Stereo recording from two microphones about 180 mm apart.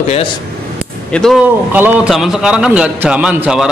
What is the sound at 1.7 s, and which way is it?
A man's voice, 10° right (ahead or behind).